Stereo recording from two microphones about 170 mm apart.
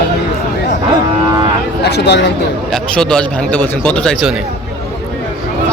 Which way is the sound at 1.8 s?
80° left.